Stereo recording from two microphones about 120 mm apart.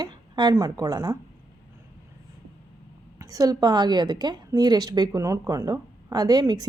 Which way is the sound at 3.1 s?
30° right (ahead or behind).